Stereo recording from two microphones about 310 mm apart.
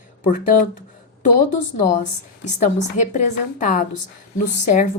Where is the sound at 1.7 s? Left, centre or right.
Left.